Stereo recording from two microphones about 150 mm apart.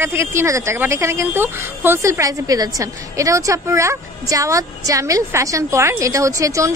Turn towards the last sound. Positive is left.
turn(degrees=-20)  # may be behind; listen again after turning